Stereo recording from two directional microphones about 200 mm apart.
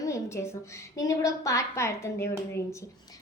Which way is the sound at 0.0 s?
15° left (ahead or behind).